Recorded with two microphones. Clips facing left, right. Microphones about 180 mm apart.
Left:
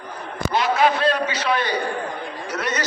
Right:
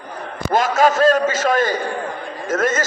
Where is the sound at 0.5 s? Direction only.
45° right (ahead or behind).